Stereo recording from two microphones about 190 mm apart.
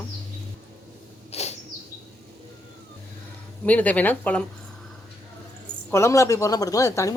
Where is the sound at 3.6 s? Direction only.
10° left (ahead or behind).